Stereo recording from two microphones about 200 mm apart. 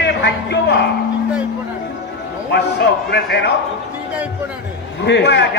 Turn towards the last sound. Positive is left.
turn(degrees=60)  # may be behind; listen again after turning